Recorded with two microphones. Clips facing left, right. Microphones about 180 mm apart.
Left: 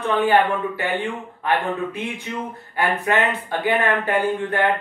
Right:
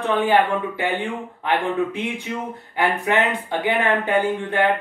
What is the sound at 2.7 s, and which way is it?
Speech, 15° right (ahead or behind).